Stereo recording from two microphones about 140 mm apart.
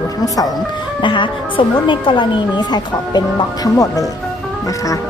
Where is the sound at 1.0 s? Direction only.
35° left (ahead or behind).